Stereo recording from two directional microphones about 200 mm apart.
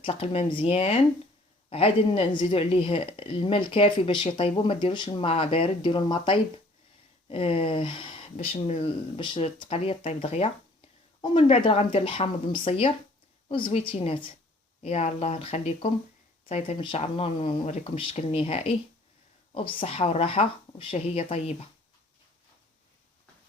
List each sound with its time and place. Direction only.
0.0 s speech: 30° left (ahead or behind)